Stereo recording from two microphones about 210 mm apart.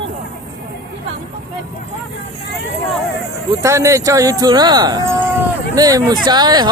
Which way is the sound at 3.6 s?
15° right (ahead or behind).